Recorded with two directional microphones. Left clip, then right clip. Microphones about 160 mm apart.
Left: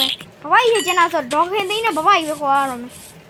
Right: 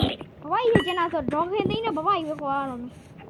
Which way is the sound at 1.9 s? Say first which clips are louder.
Left 9 dB; 35° left (ahead or behind).